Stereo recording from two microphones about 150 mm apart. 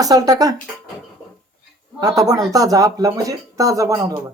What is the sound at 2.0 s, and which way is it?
Speech, 25° right (ahead or behind).